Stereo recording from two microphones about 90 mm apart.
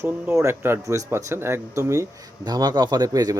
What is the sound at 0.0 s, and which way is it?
Speech, 30° right (ahead or behind).